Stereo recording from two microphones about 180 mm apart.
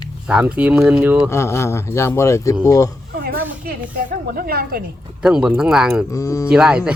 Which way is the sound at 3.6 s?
55° right (ahead or behind).